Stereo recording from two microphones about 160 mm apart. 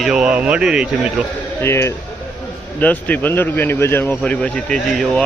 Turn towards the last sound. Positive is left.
turn(degrees=5)  # may be behind; listen again after turning